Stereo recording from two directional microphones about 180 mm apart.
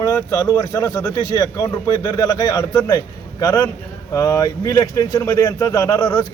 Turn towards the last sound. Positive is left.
turn(degrees=20)  # may be behind; listen again after turning